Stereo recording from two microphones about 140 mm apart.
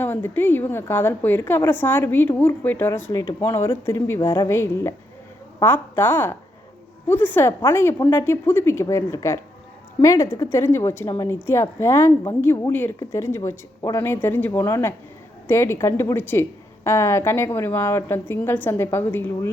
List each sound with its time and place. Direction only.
0.0 s a woman's voice: 15° left (ahead or behind)